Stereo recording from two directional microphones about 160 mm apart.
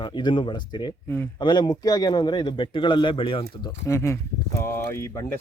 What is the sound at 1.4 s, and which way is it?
Speech, 30° left (ahead or behind).